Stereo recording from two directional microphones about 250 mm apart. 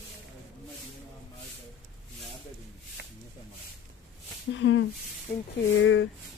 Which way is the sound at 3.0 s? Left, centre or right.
Right.